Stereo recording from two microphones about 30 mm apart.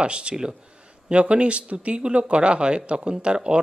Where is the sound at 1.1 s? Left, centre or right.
Right.